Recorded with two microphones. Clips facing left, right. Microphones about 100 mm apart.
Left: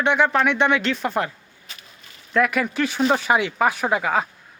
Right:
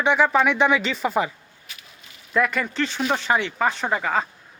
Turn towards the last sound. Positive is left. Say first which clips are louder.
# left 2 dB
turn(degrees=5)  # may be behind; listen again after turning